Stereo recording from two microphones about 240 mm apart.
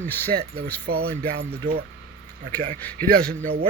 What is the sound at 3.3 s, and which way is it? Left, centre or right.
Speech, right.